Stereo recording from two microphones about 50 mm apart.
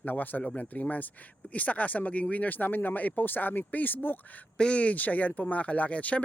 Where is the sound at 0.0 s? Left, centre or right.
Left.